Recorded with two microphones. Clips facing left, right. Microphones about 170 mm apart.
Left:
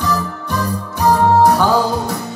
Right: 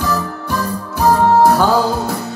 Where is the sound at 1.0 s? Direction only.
Centre (ahead or behind).